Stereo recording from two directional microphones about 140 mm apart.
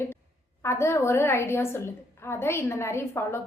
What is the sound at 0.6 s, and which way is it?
A woman's voice, 20° left (ahead or behind).